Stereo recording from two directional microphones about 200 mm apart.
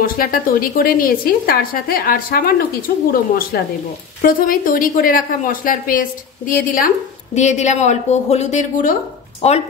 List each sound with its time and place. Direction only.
0.0 s speech: 45° left (ahead or behind)